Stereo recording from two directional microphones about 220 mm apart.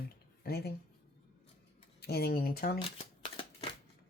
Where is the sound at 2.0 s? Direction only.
45° left (ahead or behind).